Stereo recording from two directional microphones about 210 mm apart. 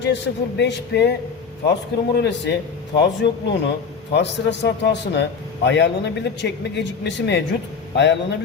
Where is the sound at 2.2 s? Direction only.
55° left (ahead or behind).